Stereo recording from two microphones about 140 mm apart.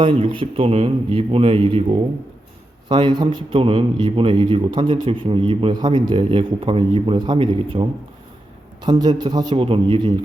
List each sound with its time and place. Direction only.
0.0 s a man's voice: 40° right (ahead or behind)